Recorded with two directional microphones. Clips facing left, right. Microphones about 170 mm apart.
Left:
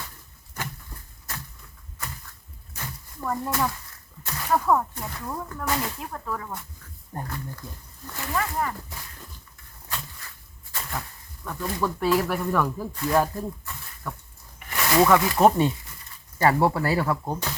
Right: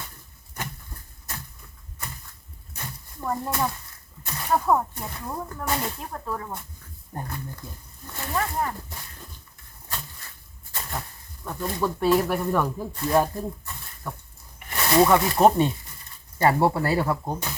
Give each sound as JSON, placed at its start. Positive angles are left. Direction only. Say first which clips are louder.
{"t": 3.2, "sound": "speech", "louder": "even", "side_deg": -25}
{"t": 10.8, "sound": "a sound", "louder": "even", "side_deg": -25}
{"t": 11.4, "sound": "speech", "louder": "right 1 dB", "side_deg": -25}